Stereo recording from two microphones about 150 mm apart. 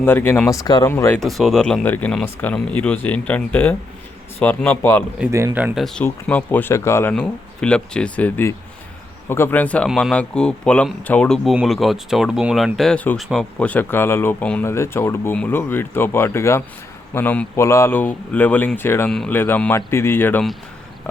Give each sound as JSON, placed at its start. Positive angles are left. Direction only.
{"t": 0.0, "sound": "speech", "side_deg": 15}
{"t": 0.5, "sound": "speech", "side_deg": 25}
{"t": 1.2, "sound": "speech", "side_deg": 0}
{"t": 5.3, "sound": "speech", "side_deg": -20}
{"t": 5.5, "sound": "speech", "side_deg": -10}
{"t": 5.8, "sound": "speech", "side_deg": 5}
{"t": 7.1, "sound": "speech", "side_deg": 5}